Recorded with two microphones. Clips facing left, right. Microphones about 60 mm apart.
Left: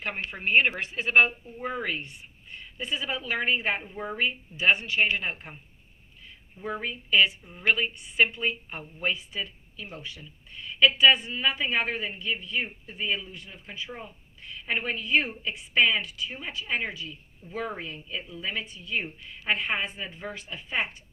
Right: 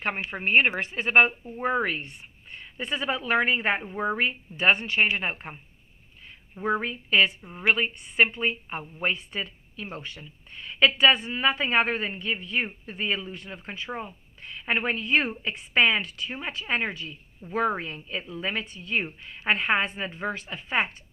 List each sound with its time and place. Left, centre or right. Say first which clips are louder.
0.3 s a woman's voice: right 1 dB; right
0.9 s a woman's voice: right 1 dB; right
5.1 s a woman's voice: right 2 dB; right
6.6 s a woman's voice: right 6 dB; right
9.1 s a woman's voice: right 2 dB; right